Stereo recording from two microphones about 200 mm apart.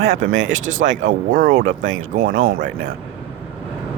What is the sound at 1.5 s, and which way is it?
Speech, 75° right (ahead or behind).